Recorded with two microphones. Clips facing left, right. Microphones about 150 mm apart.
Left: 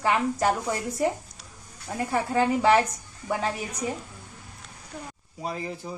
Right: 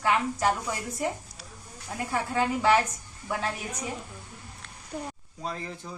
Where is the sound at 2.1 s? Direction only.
35° left (ahead or behind).